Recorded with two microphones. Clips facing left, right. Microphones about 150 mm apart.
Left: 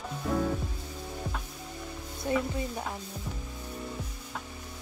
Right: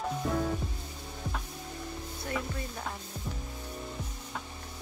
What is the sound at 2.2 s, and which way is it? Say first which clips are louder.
Stir: left 7 dB; 20° left (ahead or behind).